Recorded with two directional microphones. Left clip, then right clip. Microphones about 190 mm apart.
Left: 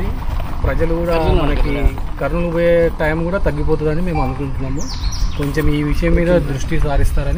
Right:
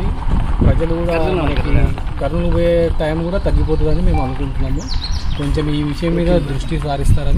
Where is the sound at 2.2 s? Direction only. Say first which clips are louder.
Left 1 dB; 10° right (ahead or behind).